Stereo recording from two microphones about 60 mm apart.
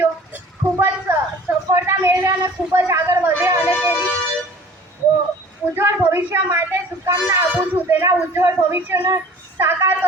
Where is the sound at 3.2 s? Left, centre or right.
Right.